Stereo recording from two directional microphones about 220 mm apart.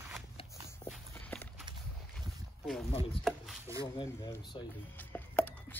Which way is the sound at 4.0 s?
20° left (ahead or behind).